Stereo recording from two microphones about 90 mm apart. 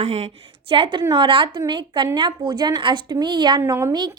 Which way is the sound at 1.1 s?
65° right (ahead or behind).